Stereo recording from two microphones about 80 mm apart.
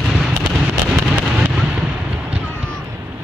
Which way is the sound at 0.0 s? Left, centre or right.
Centre.